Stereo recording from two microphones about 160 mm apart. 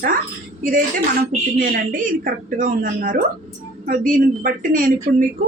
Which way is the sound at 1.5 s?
60° right (ahead or behind).